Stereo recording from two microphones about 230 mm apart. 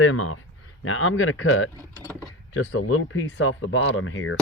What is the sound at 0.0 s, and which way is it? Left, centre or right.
Speech, left.